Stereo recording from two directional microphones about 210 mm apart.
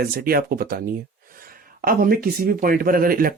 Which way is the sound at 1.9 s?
45° right (ahead or behind).